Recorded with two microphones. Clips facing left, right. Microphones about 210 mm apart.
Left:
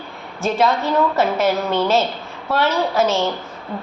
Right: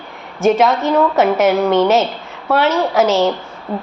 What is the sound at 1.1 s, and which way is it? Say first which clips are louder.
Speech: right 5 dB; 90° right.